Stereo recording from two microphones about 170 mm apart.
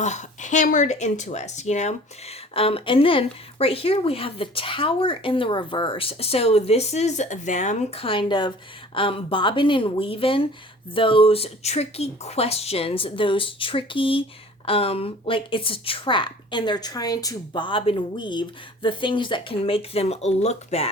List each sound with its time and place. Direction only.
0.0 s a woman's voice: 45° left (ahead or behind)